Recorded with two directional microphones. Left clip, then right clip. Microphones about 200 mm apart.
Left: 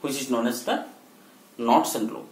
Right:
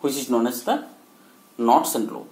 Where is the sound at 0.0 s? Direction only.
45° right (ahead or behind).